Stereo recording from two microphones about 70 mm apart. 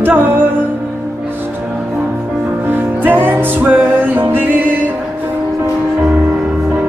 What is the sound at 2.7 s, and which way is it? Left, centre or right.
Music, right.